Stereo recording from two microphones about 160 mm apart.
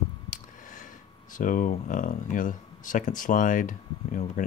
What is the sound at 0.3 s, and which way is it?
Speech, 55° left (ahead or behind).